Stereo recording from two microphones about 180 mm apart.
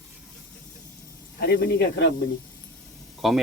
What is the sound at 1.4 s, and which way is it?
Speech, 65° left (ahead or behind).